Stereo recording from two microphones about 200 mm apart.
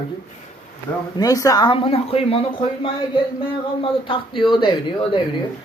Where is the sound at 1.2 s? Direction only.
15° left (ahead or behind).